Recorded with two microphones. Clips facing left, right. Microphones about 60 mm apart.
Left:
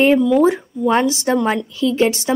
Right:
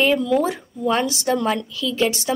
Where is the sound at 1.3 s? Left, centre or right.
Left.